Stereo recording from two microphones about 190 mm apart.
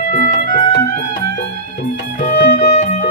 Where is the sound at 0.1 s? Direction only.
45° left (ahead or behind).